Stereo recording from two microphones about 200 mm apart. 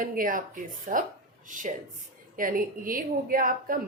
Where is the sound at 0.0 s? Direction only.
45° right (ahead or behind).